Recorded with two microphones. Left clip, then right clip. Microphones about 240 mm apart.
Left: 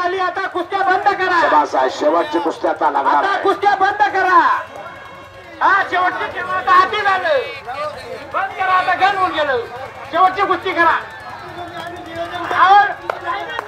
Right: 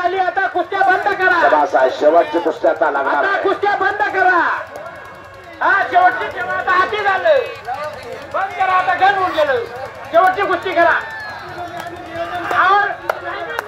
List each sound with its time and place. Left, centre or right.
0.0 s chatter: left
2.6 s speech: left
5.6 s speech: left
12.5 s speech: left